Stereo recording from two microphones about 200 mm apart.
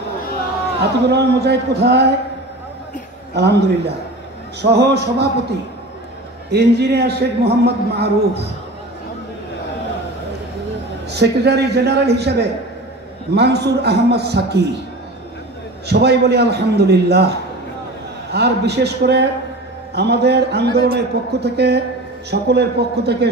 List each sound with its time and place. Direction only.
1.1 s a man's voice: 55° right (ahead or behind)
3.3 s a man's voice: 55° right (ahead or behind)
6.5 s a man's voice: 55° right (ahead or behind)
11.1 s a man's voice: 55° right (ahead or behind)
15.9 s a man's voice: 55° right (ahead or behind)